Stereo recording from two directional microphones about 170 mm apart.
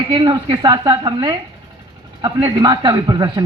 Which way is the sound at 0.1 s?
30° right (ahead or behind).